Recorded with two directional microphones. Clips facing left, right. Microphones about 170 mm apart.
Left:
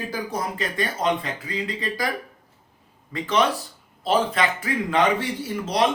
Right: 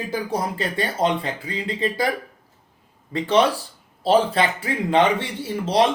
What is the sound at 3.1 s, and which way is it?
Speech, 30° right (ahead or behind).